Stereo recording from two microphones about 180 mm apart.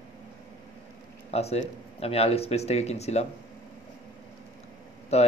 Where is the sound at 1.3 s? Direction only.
35° left (ahead or behind).